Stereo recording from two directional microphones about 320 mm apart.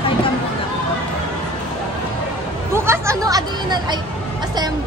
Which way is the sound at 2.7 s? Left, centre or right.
Centre.